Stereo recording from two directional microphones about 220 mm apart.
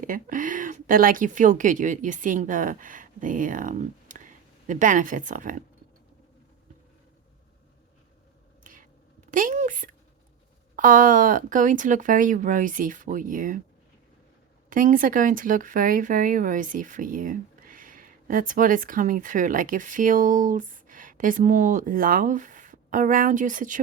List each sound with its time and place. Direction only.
0.0 s speech: 35° right (ahead or behind)
9.3 s speech: 35° right (ahead or behind)
14.7 s speech: 35° right (ahead or behind)